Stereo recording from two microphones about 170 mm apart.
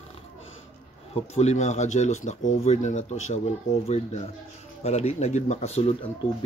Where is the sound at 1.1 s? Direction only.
40° left (ahead or behind).